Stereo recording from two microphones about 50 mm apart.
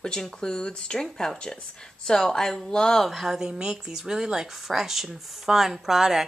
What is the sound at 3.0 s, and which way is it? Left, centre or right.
Speech, centre.